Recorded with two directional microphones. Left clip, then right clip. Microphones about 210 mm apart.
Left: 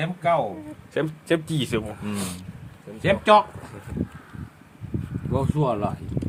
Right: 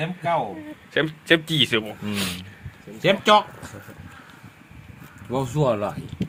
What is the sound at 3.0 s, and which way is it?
Speech, 45° right (ahead or behind).